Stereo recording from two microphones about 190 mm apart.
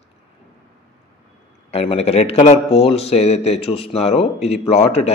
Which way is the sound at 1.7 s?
30° left (ahead or behind).